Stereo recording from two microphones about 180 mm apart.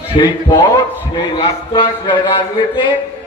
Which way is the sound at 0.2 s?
25° left (ahead or behind).